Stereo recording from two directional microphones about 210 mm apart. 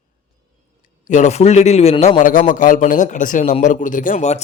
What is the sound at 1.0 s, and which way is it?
A man's voice, 35° left (ahead or behind).